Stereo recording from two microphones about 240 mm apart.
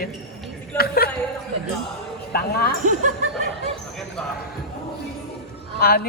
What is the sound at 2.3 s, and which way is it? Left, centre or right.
Speech, left.